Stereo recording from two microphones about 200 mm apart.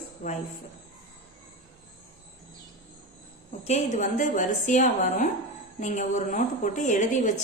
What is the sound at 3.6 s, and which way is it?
A woman's voice, 35° left (ahead or behind).